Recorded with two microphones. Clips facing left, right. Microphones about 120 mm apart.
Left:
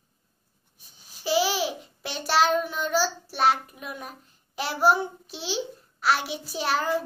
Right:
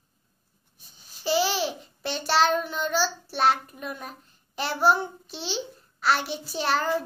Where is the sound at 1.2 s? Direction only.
5° left (ahead or behind).